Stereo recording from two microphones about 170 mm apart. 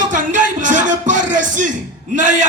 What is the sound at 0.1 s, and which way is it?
Music, 50° right (ahead or behind).